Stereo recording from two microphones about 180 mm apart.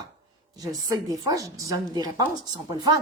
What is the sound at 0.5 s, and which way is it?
Speech, 20° right (ahead or behind).